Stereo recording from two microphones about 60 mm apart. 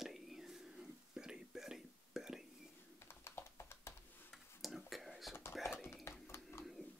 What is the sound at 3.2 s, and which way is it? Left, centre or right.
Computer keyboard, left.